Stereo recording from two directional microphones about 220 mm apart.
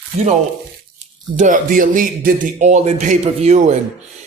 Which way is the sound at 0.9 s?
35° right (ahead or behind).